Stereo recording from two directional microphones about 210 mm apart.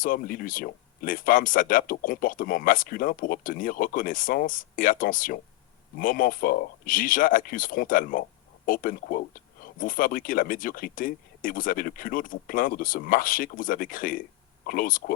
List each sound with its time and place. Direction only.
0.0 s speech: 40° left (ahead or behind)